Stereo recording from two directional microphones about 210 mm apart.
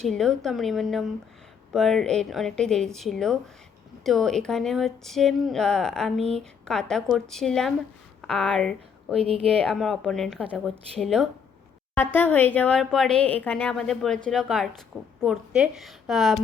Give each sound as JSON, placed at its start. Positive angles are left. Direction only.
{"t": 0.0, "sound": "a woman's voice", "side_deg": 0}
{"t": 9.1, "sound": "speech", "side_deg": -30}
{"t": 9.6, "sound": "a woman's voice", "side_deg": 0}